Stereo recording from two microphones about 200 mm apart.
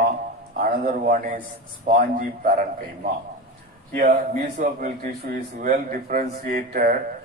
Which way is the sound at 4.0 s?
45° right (ahead or behind).